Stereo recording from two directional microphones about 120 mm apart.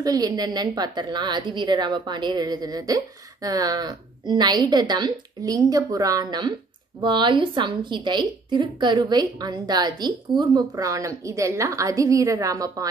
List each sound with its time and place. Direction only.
0.0 s a woman's voice: 30° right (ahead or behind)